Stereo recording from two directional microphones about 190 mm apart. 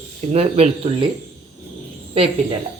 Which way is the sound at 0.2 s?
35° right (ahead or behind).